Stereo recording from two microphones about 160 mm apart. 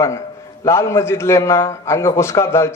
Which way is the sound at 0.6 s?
20° left (ahead or behind).